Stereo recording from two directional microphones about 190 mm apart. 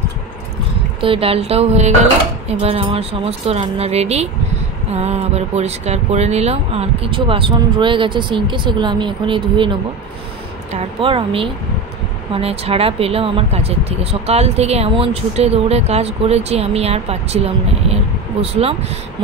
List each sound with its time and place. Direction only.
1.0 s speech: 30° right (ahead or behind)